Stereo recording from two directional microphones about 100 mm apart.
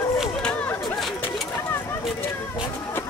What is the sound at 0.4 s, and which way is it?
Chatter, 10° left (ahead or behind).